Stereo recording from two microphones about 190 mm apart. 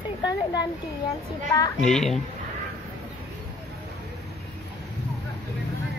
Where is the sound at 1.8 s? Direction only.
Centre (ahead or behind).